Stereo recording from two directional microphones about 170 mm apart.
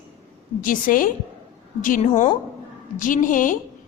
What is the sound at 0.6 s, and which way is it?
A man's voice, 50° left (ahead or behind).